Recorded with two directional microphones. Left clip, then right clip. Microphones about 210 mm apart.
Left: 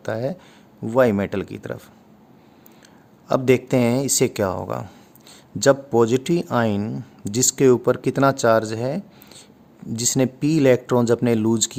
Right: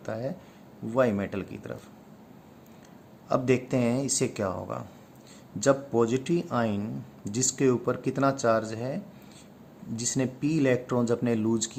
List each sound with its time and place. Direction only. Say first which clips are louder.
0.0 s speech: left 8 dB; 55° left (ahead or behind)
3.2 s speech: left 7 dB; 55° left (ahead or behind)